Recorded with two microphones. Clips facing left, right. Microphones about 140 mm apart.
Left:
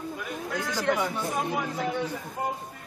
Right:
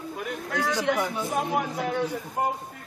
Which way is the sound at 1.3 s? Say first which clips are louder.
Right 3 dB; 60° right (ahead or behind).